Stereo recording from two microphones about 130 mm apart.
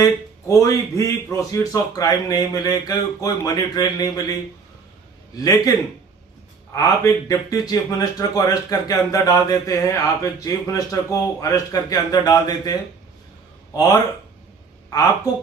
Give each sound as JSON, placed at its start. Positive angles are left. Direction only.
{"t": 0.0, "sound": "speech", "side_deg": 25}
{"t": 5.4, "sound": "speech", "side_deg": 25}
{"t": 6.7, "sound": "speech", "side_deg": 25}
{"t": 13.7, "sound": "speech", "side_deg": 25}
{"t": 14.8, "sound": "a sound", "side_deg": 30}